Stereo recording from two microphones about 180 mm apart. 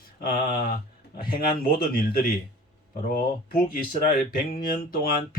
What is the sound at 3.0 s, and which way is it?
Speech, 50° left (ahead or behind).